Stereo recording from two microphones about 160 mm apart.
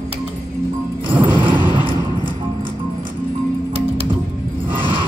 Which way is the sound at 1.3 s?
30° right (ahead or behind).